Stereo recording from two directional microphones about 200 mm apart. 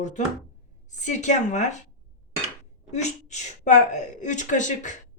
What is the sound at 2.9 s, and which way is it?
Speech, 35° left (ahead or behind).